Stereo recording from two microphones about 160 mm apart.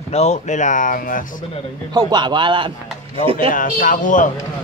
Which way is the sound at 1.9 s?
25° right (ahead or behind).